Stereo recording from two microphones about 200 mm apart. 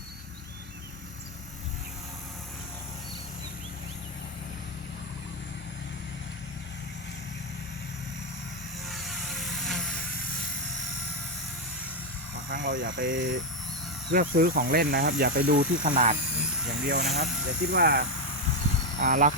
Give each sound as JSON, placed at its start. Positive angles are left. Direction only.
{"t": 8.9, "sound": "helicopter", "side_deg": 0}
{"t": 12.5, "sound": "speech", "side_deg": -50}
{"t": 18.9, "sound": "speech", "side_deg": -40}